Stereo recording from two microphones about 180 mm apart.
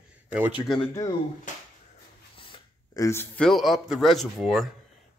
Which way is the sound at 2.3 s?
30° left (ahead or behind).